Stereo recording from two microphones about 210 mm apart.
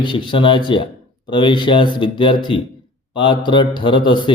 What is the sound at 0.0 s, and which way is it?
Speech, 25° left (ahead or behind).